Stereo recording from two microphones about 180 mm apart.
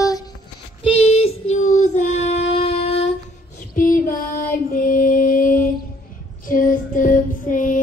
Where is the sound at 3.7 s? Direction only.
50° left (ahead or behind).